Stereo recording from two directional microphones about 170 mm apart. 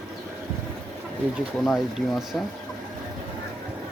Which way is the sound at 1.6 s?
Centre (ahead or behind).